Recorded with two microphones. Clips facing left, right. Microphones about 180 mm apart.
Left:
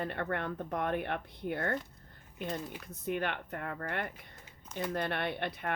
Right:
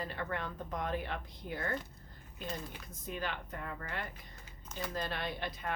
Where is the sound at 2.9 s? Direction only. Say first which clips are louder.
Left 6 dB; 60° left (ahead or behind).